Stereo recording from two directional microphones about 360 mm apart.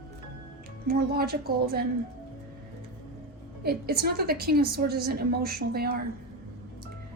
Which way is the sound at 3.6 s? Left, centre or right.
Right.